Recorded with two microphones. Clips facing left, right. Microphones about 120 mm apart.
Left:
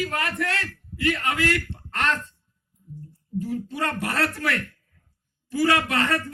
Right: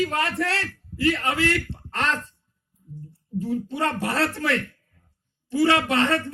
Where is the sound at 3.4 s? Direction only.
25° right (ahead or behind).